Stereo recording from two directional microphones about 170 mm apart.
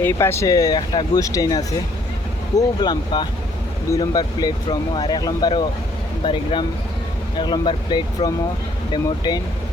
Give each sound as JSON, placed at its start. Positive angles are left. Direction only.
{"t": 0.0, "sound": "speech", "side_deg": 15}